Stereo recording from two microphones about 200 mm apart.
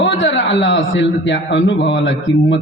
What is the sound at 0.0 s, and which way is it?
A man's voice, 65° left (ahead or behind).